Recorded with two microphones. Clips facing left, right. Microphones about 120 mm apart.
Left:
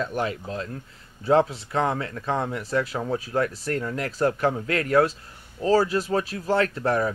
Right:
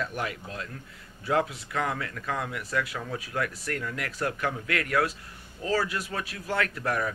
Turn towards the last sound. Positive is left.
turn(degrees=30)  # may be behind; listen again after turning